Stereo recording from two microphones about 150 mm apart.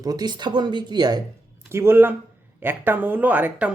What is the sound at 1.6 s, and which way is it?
A man's voice, 15° right (ahead or behind).